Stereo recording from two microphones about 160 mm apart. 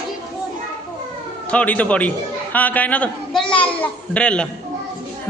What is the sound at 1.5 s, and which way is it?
A man's voice, 10° left (ahead or behind).